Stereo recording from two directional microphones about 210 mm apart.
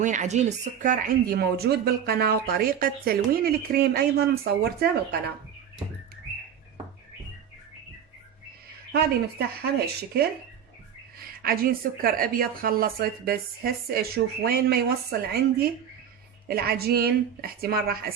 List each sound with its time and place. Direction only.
0.0 s speech: 35° right (ahead or behind)
8.9 s speech: 50° right (ahead or behind)
11.4 s speech: 45° right (ahead or behind)